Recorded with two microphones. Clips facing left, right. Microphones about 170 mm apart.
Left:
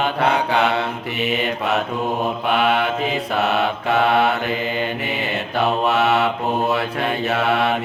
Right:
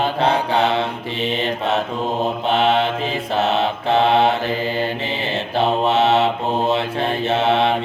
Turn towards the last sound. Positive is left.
turn(degrees=-25)  # may be behind; listen again after turning